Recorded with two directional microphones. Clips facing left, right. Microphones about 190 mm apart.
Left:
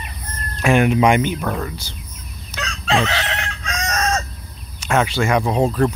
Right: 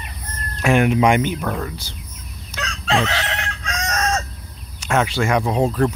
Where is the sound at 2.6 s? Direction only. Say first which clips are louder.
Left 1 dB; 15° left (ahead or behind).